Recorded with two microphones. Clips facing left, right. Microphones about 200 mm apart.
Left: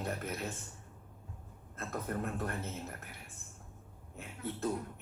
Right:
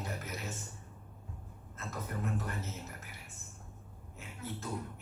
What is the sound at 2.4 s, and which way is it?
Speech, 55° left (ahead or behind).